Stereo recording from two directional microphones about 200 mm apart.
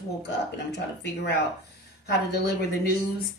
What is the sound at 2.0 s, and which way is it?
Speech, 55° left (ahead or behind).